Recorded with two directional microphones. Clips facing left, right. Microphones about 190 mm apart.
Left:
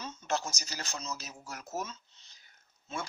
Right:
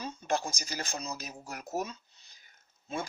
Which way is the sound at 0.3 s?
15° right (ahead or behind).